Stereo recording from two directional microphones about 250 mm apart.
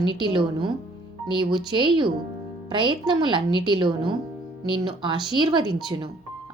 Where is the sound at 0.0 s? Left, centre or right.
Centre.